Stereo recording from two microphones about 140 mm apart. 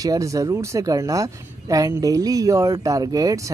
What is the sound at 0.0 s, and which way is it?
Speech, 25° right (ahead or behind).